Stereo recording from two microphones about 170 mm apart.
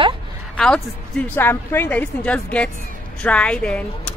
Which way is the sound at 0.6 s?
5° left (ahead or behind).